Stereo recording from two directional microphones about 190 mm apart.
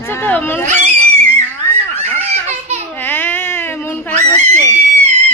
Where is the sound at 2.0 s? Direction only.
35° right (ahead or behind).